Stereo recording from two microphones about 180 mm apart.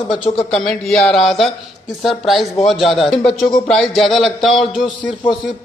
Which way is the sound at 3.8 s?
Centre (ahead or behind).